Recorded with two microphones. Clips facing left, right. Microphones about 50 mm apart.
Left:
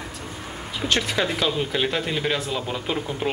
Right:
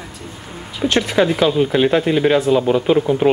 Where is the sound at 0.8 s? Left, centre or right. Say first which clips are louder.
Right 8 dB; centre; by 3.2 s right.